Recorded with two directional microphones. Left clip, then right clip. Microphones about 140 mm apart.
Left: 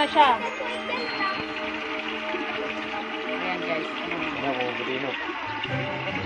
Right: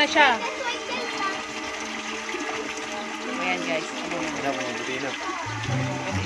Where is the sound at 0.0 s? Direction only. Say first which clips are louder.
Right 1 dB; 30° right (ahead or behind).